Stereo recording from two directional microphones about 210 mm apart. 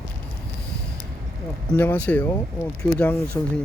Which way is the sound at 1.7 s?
10° left (ahead or behind).